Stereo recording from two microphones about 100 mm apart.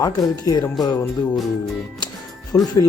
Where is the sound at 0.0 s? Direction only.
40° left (ahead or behind).